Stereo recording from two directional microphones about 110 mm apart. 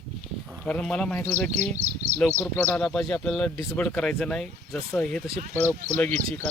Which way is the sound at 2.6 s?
10° left (ahead or behind).